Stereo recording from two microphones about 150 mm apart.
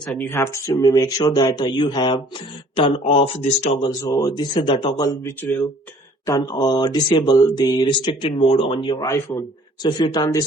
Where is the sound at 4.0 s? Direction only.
25° left (ahead or behind).